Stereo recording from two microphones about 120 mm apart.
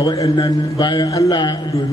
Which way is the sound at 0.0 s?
40° left (ahead or behind).